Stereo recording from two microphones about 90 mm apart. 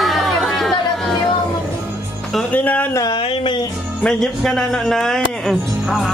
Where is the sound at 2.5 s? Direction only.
20° left (ahead or behind).